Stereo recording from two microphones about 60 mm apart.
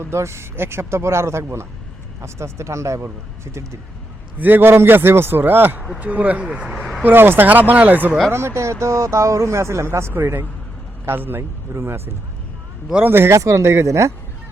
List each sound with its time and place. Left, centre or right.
0.0 s speech: right
4.4 s a man's voice: right
6.0 s speech: right
6.7 s speech: centre
7.0 s a man's voice: right
8.3 s a man's voice: right
13.4 s speech: right